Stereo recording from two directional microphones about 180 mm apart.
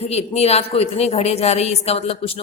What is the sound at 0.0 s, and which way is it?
A woman's voice, 35° left (ahead or behind).